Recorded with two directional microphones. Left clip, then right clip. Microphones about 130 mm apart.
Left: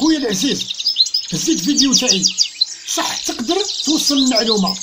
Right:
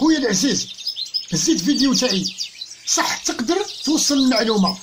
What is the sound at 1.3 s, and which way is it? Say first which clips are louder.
Speech: left 2 dB; 10° left (ahead or behind).